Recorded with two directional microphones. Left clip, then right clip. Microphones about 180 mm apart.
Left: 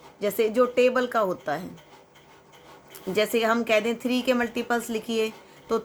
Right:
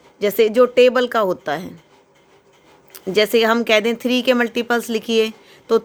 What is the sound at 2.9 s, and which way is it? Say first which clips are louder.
Speech: right 8 dB; 50° right (ahead or behind).